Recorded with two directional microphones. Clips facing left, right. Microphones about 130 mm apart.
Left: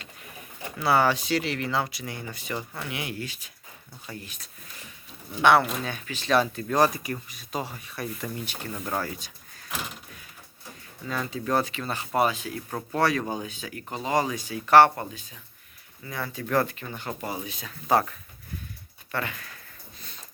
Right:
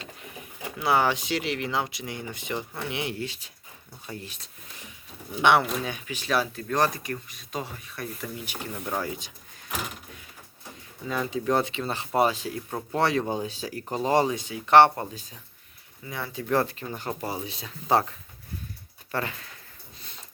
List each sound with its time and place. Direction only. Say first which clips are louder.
0.6 s speech: left 1 dB; 15° right (ahead or behind)
5.4 s speech: left 1 dB; 15° right (ahead or behind)
6.7 s speech: left 2 dB; 5° left (ahead or behind); by 9.6 s 20° right (ahead or behind)
11.1 s speech: right 2 dB; 15° right (ahead or behind)
12.7 s speech: even; 20° right (ahead or behind)
15.1 s speech: right 2 dB; 40° right (ahead or behind)
16.0 s speech: right 2 dB; 20° right (ahead or behind)
19.1 s speech: right 1 dB; 30° right (ahead or behind)